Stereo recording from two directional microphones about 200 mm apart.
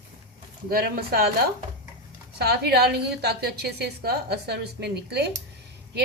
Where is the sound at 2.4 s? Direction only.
55° right (ahead or behind).